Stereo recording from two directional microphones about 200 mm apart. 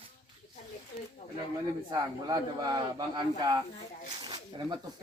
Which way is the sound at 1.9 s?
20° right (ahead or behind).